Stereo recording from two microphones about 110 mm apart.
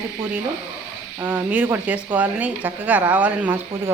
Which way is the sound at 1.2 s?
15° right (ahead or behind).